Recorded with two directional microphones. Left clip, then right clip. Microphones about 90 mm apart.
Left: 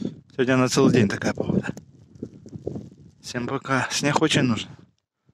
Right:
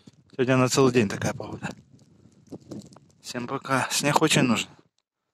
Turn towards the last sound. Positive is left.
turn(degrees=15)  # may be behind; listen again after turning